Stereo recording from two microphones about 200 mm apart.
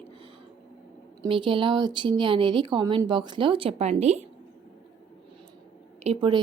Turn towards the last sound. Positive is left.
turn(degrees=-25)  # may be behind; listen again after turning